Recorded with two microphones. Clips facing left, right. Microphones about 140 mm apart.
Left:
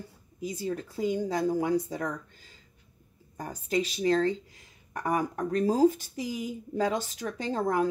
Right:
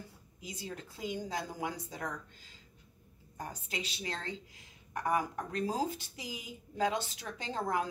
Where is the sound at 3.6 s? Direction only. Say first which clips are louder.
Left 17 dB; 40° left (ahead or behind).